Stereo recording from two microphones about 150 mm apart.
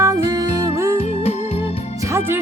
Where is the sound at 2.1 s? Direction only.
15° right (ahead or behind).